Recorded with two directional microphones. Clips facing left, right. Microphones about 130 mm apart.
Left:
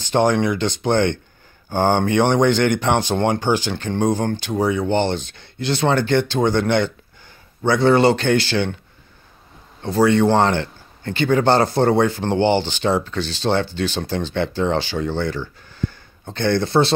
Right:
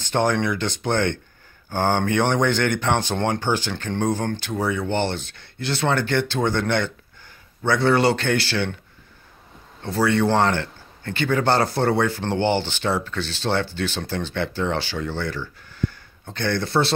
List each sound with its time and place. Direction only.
0.0 s speech: 20° left (ahead or behind)
9.8 s speech: 20° left (ahead or behind)